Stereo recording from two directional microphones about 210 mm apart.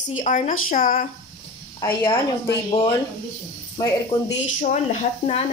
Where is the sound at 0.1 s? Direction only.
35° left (ahead or behind).